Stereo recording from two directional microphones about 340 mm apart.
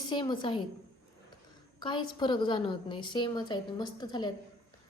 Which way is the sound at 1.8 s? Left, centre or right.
Centre.